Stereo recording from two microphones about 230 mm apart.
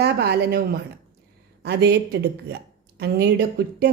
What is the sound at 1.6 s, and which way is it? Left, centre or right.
A woman's voice, right.